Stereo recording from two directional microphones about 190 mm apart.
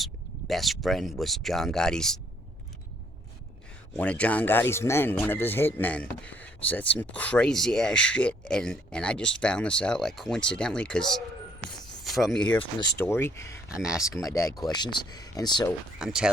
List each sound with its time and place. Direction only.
0.0 s speech: centre (ahead or behind)
3.9 s speech: 5° left (ahead or behind)
13.8 s speech: 5° right (ahead or behind)
14.3 s speech: 20° left (ahead or behind)
16.0 s speech: 5° right (ahead or behind)